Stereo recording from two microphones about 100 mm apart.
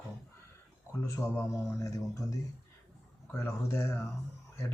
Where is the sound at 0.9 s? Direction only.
25° left (ahead or behind).